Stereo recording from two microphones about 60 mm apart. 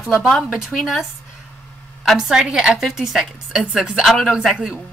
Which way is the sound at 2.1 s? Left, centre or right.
Centre.